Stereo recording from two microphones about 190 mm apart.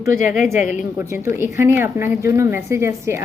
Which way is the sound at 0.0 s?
15° right (ahead or behind).